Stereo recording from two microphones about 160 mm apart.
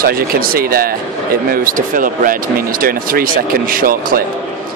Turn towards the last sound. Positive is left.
turn(degrees=-60)  # may be behind; listen again after turning